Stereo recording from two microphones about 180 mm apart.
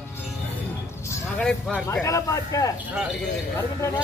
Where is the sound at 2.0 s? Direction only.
20° left (ahead or behind).